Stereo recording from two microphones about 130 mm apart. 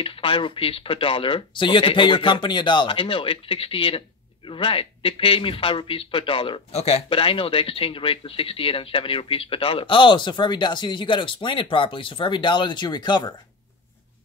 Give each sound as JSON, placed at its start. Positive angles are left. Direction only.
{"t": 0.0, "sound": "a man's voice", "side_deg": 40}